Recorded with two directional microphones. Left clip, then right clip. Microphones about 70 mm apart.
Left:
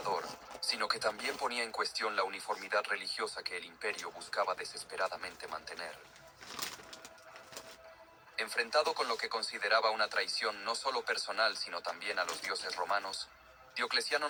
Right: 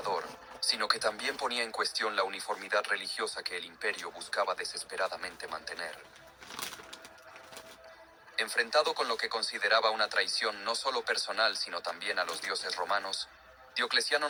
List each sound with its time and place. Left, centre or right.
0.0 s speech: right
6.6 s bird: right
8.4 s speech: right